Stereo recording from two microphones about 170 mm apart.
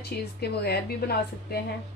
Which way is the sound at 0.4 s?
70° left (ahead or behind).